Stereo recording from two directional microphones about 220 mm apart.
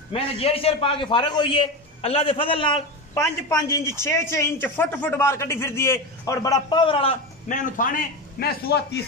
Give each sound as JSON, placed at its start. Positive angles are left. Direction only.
{"t": 0.1, "sound": "a man's voice", "side_deg": 25}